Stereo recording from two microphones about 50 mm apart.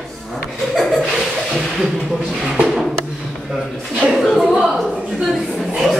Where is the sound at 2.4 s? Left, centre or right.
Centre.